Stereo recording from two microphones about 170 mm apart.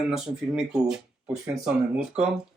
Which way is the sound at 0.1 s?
5° right (ahead or behind).